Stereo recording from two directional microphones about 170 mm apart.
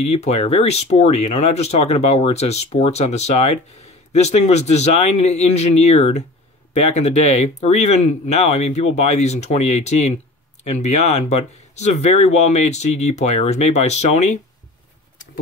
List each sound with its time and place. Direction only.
0.1 s speech: 40° left (ahead or behind)